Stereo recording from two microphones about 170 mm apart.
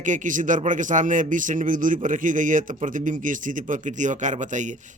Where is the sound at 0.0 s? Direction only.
50° right (ahead or behind).